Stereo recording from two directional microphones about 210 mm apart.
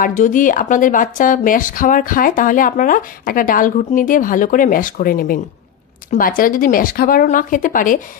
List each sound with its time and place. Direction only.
0.0 s a woman's voice: 40° left (ahead or behind)